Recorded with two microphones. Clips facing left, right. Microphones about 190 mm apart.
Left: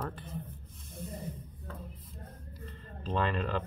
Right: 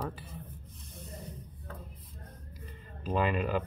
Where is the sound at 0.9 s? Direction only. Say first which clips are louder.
Left 5 dB; centre (ahead or behind).